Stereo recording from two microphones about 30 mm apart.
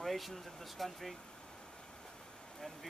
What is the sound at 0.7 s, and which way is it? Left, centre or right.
Speech, centre.